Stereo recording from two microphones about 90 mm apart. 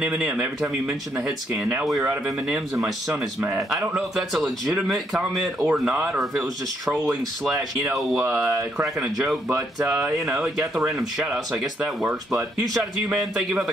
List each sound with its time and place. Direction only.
0.0 s speech: 10° right (ahead or behind)
7.4 s speech: centre (ahead or behind)
9.5 s speech: 35° right (ahead or behind)
9.9 s speech: 5° right (ahead or behind)